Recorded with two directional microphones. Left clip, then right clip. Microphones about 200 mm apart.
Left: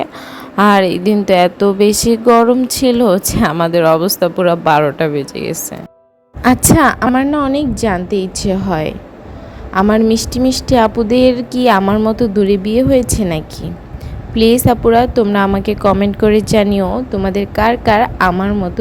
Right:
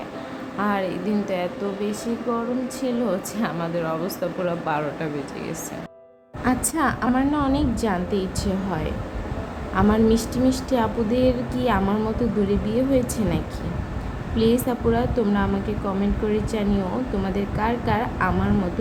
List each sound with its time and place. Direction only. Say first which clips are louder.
0.5 s a woman's voice: left 15 dB; 55° left (ahead or behind)